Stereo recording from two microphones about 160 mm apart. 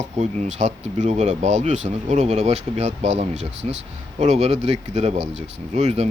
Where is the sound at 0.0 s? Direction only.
50° right (ahead or behind).